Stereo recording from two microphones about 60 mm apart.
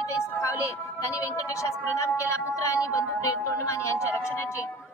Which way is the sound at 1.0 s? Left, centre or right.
Left.